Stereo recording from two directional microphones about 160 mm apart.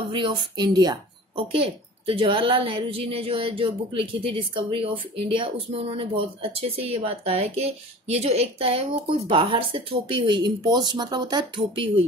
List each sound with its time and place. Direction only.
0.1 s a woman's voice: 30° right (ahead or behind)